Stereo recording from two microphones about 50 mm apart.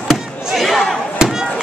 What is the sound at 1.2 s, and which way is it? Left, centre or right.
Chop, centre.